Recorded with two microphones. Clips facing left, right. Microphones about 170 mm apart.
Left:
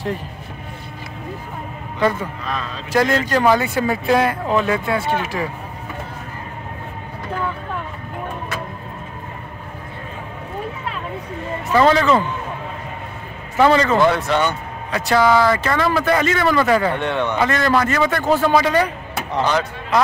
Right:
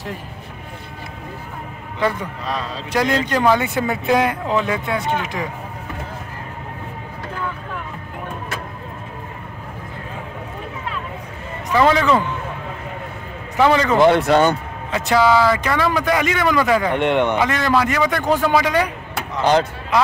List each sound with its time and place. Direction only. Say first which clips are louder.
2.9 s speech: left 2 dB; 20° right (ahead or behind)
11.7 s speech: left 1 dB; 10° right (ahead or behind)
13.6 s speech: left 1 dB; 10° right (ahead or behind)
14.0 s speech: right 4 dB; 30° right (ahead or behind)
14.9 s speech: even; 20° right (ahead or behind)
15.2 s speech: left 1 dB; 5° right (ahead or behind)